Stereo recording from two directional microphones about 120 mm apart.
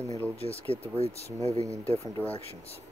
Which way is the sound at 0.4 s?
55° left (ahead or behind).